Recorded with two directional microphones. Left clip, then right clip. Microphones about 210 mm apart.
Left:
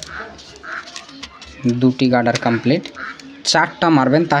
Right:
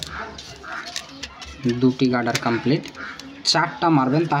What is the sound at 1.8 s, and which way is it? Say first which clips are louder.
Speech: left 5 dB; 35° left (ahead or behind).